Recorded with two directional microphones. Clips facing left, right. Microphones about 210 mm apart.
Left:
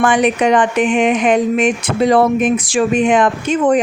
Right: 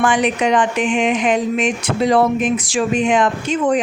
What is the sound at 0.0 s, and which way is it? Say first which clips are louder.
Speech: left 3 dB; 55° left (ahead or behind).